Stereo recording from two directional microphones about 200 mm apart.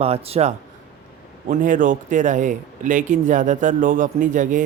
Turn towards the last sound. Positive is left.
turn(degrees=-40)  # may be behind; listen again after turning